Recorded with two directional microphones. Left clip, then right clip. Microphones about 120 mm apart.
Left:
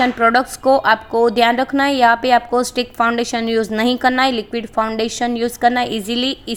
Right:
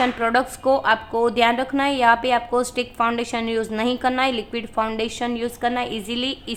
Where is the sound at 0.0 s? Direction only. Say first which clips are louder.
Left 5 dB; 35° left (ahead or behind).